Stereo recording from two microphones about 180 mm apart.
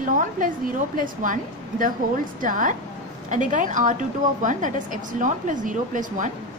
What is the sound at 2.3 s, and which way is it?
A woman's voice, 45° right (ahead or behind).